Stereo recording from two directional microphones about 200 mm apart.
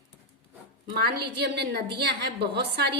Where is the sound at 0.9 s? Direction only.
55° right (ahead or behind).